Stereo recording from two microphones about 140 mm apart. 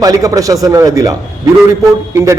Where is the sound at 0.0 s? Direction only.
25° right (ahead or behind).